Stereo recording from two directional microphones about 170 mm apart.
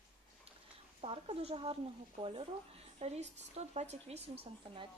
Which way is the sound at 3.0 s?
40° right (ahead or behind).